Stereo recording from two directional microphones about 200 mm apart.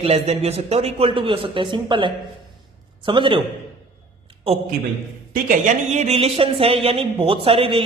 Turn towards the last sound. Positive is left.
turn(degrees=-25)  # may be behind; listen again after turning